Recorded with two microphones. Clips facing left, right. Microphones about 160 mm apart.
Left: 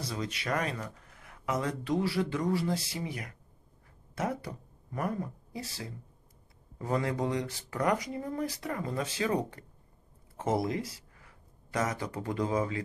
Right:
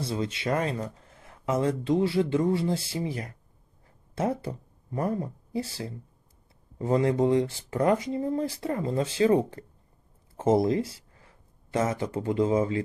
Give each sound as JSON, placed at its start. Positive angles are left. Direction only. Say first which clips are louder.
{"t": 0.0, "sound": "speech", "louder": "right 6 dB", "side_deg": -25}